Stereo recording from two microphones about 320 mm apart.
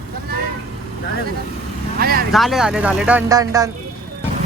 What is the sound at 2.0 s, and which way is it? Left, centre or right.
Speech, right.